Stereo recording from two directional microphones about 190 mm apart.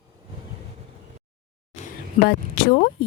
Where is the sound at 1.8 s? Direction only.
50° left (ahead or behind).